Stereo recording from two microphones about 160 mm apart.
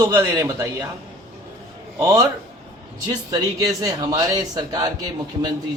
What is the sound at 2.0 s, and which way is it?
A man's voice, 20° right (ahead or behind).